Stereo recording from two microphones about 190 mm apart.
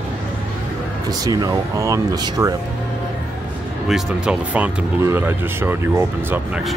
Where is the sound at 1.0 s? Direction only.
20° right (ahead or behind).